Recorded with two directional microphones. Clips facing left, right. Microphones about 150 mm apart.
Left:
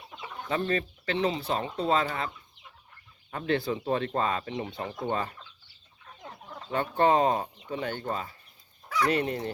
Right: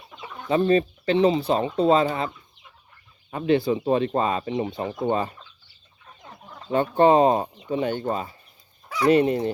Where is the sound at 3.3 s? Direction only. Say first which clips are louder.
Right 7 dB; 15° right (ahead or behind).